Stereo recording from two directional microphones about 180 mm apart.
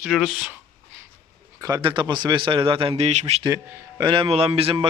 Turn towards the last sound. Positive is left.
turn(degrees=-35)  # may be behind; listen again after turning